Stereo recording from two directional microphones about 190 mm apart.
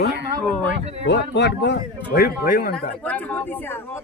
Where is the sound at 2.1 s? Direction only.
55° left (ahead or behind).